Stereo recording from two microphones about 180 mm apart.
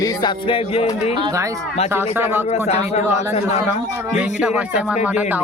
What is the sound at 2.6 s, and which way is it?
Speech, 35° left (ahead or behind).